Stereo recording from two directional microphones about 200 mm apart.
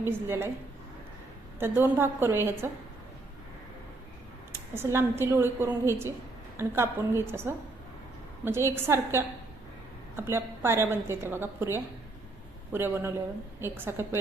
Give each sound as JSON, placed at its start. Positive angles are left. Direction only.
{"t": 0.0, "sound": "a woman's voice", "side_deg": -10}
{"t": 1.5, "sound": "a woman's voice", "side_deg": -10}
{"t": 4.7, "sound": "a woman's voice", "side_deg": -10}